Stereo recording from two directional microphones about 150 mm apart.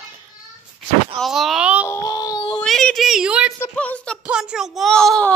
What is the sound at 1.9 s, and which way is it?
Baby cry, 20° left (ahead or behind).